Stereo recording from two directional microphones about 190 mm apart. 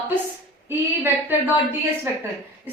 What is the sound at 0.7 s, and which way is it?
Speech, 10° right (ahead or behind).